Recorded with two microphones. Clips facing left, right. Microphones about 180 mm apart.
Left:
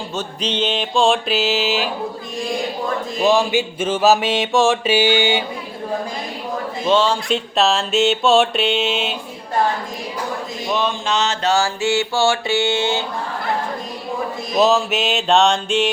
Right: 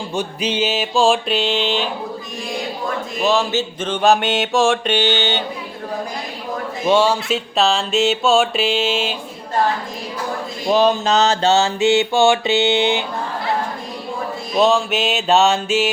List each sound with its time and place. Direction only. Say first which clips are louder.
0.1 s music: right 3 dB; 10° right (ahead or behind)
3.2 s mantra: left 2 dB; 15° left (ahead or behind)
6.8 s music: right 2 dB; 10° right (ahead or behind)
10.7 s mantra: right 6 dB; 35° right (ahead or behind)
11.5 s music: right 1 dB; 20° right (ahead or behind)
14.6 s music: even; centre (ahead or behind)